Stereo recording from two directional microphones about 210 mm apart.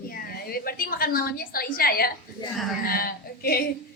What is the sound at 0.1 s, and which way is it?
A woman's voice, 45° left (ahead or behind).